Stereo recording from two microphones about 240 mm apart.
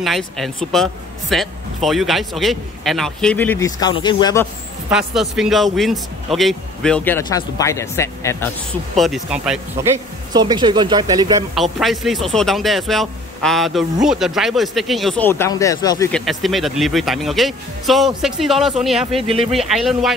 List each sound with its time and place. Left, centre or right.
0.0 s speech: centre
4.8 s speech: centre
8.9 s speech: centre
10.3 s speech: centre
11.5 s speech: centre
16.1 s speech: centre